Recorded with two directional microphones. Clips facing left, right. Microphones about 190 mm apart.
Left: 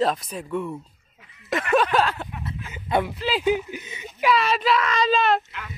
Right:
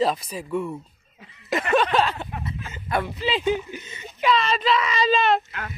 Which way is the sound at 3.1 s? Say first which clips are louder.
Left 1 dB; centre (ahead or behind).